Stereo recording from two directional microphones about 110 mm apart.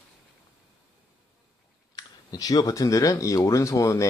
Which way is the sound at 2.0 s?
35° left (ahead or behind).